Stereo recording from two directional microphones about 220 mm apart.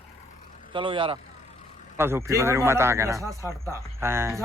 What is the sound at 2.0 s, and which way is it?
A man's voice, 10° right (ahead or behind).